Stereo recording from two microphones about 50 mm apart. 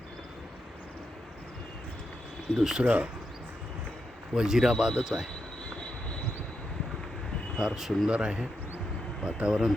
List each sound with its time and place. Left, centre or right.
2.6 s a man's voice: centre
2.8 s speech: right
4.4 s a man's voice: centre
7.5 s a man's voice: centre
8.1 s a man's voice: centre